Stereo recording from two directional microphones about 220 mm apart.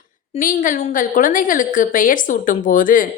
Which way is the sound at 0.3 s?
35° left (ahead or behind).